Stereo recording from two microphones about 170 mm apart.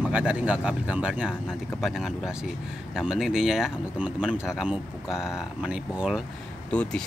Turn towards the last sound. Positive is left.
turn(degrees=5)  # may be behind; listen again after turning